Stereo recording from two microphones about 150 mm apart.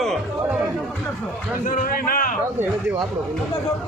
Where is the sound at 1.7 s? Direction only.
65° left (ahead or behind).